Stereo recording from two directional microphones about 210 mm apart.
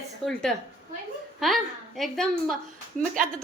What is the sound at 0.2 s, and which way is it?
Speech, centre (ahead or behind).